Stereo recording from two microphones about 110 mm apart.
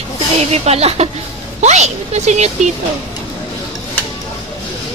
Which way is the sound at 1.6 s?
90° right.